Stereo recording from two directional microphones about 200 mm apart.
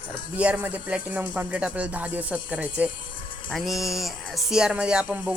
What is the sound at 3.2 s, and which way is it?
Music, 25° left (ahead or behind).